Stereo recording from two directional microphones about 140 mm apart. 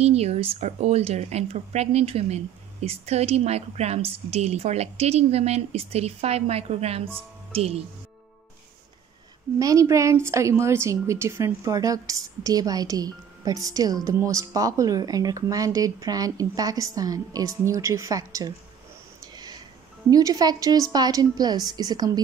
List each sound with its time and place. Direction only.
0.0 s a woman's voice: 50° right (ahead or behind)
9.6 s a woman's voice: 25° right (ahead or behind)
20.1 s a woman's voice: 25° right (ahead or behind)